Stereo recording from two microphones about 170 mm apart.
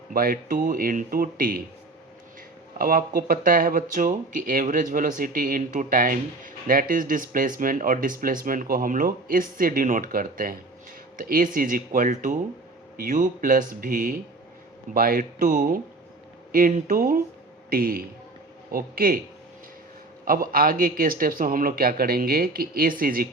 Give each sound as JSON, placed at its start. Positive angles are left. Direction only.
{"t": 0.1, "sound": "a man's voice", "side_deg": -55}
{"t": 2.7, "sound": "a man's voice", "side_deg": -55}
{"t": 20.2, "sound": "a man's voice", "side_deg": -55}